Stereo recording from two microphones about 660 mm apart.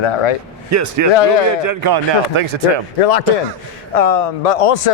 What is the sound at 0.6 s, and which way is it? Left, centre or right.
A man's voice, right.